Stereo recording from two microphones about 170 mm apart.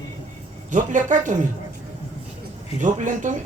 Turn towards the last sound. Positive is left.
turn(degrees=-50)  # may be behind; listen again after turning